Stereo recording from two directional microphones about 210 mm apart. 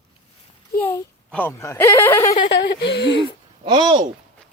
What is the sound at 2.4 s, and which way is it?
Speech, 50° left (ahead or behind).